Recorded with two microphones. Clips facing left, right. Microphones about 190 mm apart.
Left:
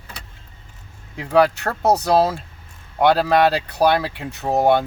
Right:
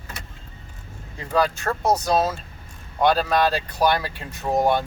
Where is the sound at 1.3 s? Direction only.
65° left (ahead or behind).